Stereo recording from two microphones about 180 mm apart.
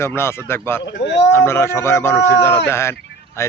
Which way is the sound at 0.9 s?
75° left (ahead or behind).